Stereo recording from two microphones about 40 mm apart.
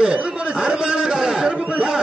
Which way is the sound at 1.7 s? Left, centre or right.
Right.